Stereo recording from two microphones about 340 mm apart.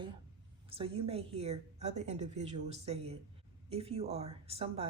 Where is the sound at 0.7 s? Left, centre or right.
Centre.